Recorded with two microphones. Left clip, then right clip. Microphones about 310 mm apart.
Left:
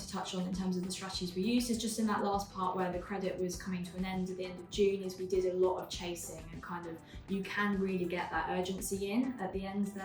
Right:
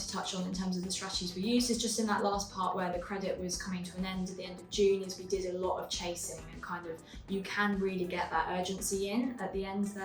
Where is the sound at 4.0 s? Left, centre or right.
Centre.